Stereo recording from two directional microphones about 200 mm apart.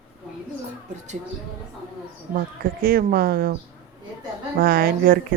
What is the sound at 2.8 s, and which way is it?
Speech, 45° right (ahead or behind).